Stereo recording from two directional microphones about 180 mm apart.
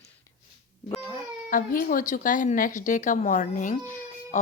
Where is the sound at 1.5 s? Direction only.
50° left (ahead or behind).